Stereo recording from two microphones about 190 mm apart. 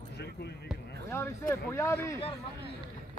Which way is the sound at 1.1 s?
15° left (ahead or behind).